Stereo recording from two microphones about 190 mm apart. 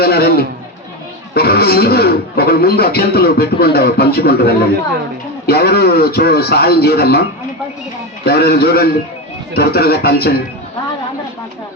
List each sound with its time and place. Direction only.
0.0 s speech: 55° left (ahead or behind)
8.2 s speech: 55° left (ahead or behind)